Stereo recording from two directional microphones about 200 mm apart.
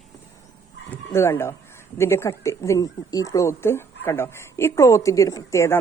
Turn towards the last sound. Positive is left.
turn(degrees=15)  # may be behind; listen again after turning